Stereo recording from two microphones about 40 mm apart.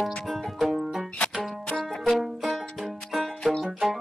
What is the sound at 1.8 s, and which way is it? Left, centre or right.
Music, centre.